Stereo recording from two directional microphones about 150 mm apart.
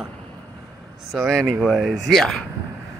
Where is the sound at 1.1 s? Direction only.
Centre (ahead or behind).